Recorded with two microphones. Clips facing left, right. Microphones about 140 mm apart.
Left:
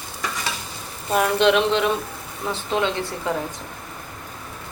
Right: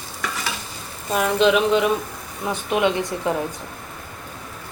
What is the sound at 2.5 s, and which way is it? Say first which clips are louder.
Speech: right 3 dB; 15° right (ahead or behind).